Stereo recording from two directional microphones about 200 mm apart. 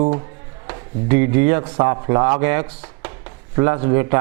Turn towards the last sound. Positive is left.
turn(degrees=-15)  # may be behind; listen again after turning